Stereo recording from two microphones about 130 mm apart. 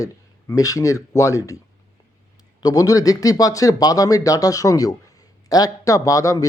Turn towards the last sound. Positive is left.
turn(degrees=25)  # may be behind; listen again after turning